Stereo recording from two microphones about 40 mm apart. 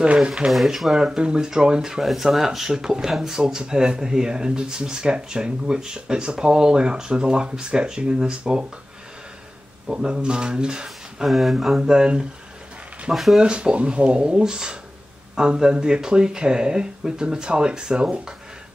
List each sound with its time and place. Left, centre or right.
0.0 s speech: right
0.5 s speech: centre
0.9 s speech: right
9.8 s speech: right
11.2 s speech: centre
11.8 s speech: right
13.1 s speech: centre
13.4 s speech: right